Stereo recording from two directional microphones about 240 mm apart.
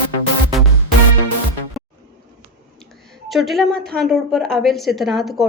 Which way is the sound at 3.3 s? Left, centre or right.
Centre.